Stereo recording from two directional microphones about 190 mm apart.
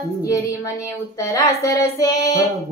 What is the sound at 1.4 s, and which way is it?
Child singing, 15° left (ahead or behind).